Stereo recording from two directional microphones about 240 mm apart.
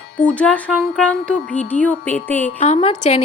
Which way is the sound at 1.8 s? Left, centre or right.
Centre.